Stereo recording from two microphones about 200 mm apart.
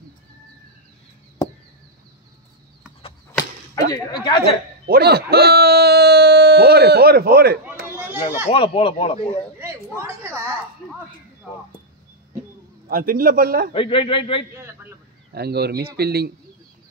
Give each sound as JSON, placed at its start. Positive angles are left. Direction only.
{"t": 3.3, "sound": "whip", "side_deg": 15}
{"t": 4.8, "sound": "speech", "side_deg": -50}
{"t": 8.5, "sound": "speech", "side_deg": 25}
{"t": 9.6, "sound": "a sound", "side_deg": -15}
{"t": 12.8, "sound": "a man's voice", "side_deg": -45}
{"t": 13.7, "sound": "speech", "side_deg": 25}
{"t": 15.3, "sound": "a man's voice", "side_deg": -55}